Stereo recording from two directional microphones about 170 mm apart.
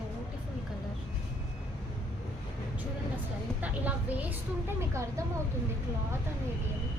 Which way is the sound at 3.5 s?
10° right (ahead or behind).